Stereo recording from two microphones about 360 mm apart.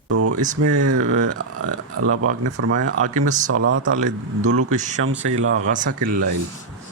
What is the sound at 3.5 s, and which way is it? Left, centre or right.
Speech, right.